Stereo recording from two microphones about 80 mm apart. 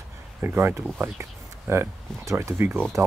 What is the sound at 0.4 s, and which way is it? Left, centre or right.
Speech, right.